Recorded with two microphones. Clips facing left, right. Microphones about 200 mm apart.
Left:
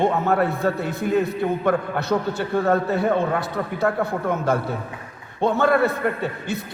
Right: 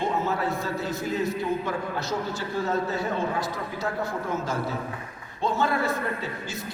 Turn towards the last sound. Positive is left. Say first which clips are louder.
# left 6 dB
turn(degrees=60)  # may be behind; listen again after turning